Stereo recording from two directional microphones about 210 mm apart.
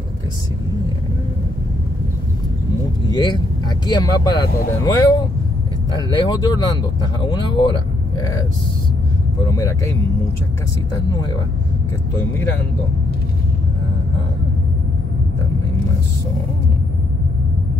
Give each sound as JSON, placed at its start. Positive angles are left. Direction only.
{"t": 3.1, "sound": "speech", "side_deg": 20}
{"t": 5.9, "sound": "speech", "side_deg": 20}
{"t": 9.5, "sound": "speech", "side_deg": 15}
{"t": 11.1, "sound": "speech", "side_deg": 20}